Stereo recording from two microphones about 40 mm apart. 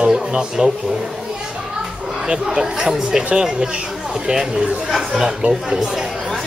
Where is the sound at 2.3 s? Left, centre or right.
Centre.